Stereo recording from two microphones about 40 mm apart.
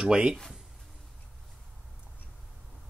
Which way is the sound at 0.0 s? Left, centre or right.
Right.